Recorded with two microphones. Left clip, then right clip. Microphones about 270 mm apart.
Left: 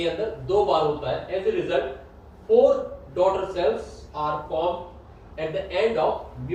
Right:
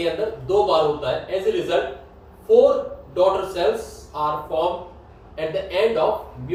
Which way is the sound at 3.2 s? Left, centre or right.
Centre.